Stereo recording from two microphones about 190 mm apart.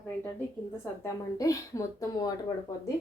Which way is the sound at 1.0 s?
15° left (ahead or behind).